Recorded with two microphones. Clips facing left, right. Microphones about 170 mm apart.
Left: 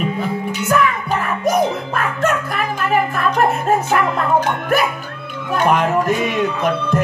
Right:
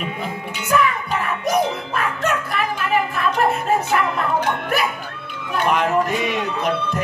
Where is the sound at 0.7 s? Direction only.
50° left (ahead or behind).